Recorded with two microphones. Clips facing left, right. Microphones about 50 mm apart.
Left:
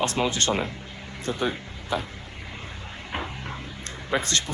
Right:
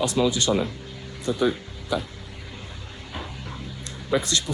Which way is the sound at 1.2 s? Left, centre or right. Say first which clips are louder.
Right 4 dB; left.